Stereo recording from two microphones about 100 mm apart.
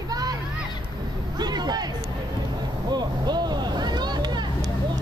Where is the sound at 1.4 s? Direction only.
45° right (ahead or behind).